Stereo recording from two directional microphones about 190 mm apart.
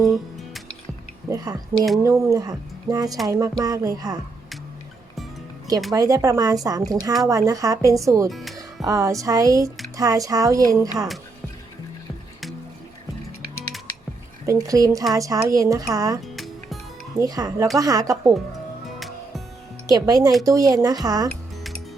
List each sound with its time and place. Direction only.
0.0 s music: centre (ahead or behind)
1.3 s speech: 20° right (ahead or behind)
5.9 s speech: 20° right (ahead or behind)
8.3 s speech: centre (ahead or behind)
8.5 s speech: 20° right (ahead or behind)
14.4 s speech: 15° right (ahead or behind)
16.2 s music: centre (ahead or behind)
17.2 s speech: 20° right (ahead or behind)
18.9 s music: centre (ahead or behind)
19.9 s speech: 20° right (ahead or behind)